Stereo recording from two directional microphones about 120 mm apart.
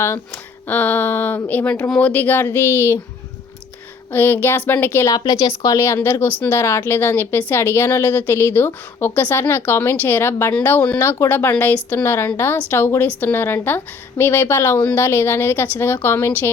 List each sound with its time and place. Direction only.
0.7 s speech: 15° left (ahead or behind)
4.1 s speech: 15° left (ahead or behind)
5.0 s a woman's voice: 30° left (ahead or behind)